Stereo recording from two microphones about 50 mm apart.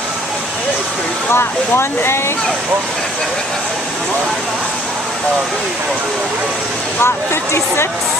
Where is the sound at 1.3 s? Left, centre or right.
Left.